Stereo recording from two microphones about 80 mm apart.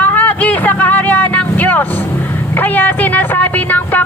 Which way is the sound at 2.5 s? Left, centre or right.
Left.